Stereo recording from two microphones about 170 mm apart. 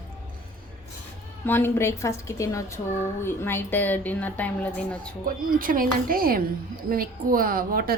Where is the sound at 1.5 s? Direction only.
15° left (ahead or behind).